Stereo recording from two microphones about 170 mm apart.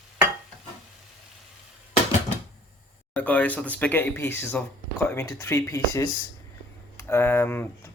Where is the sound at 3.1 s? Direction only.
10° left (ahead or behind).